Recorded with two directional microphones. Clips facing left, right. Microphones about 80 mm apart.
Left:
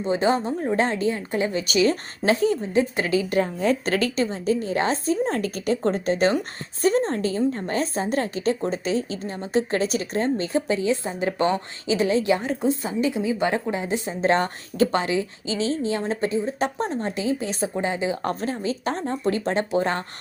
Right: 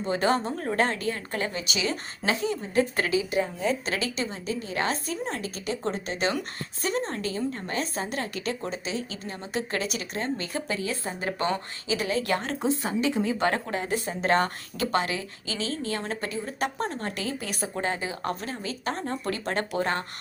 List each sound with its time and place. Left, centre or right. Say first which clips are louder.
0.0 s a woman's voice: left 3 dB; centre
1.6 s a woman's voice: left 9 dB; left
2.7 s a woman's voice: left 3 dB; left
3.1 s a woman's voice: left 4 dB; left
3.8 s a woman's voice: left 7 dB; left
5.4 s a woman's voice: left 8 dB; left
12.2 s a woman's voice: left 5 dB; centre
17.7 s speech: left 4 dB; centre
18.2 s a woman's voice: left 5 dB; left